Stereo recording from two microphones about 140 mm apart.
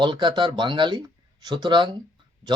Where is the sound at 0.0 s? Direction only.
35° right (ahead or behind).